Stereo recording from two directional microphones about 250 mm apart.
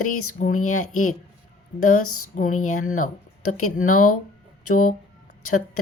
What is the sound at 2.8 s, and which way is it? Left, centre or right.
Speech, left.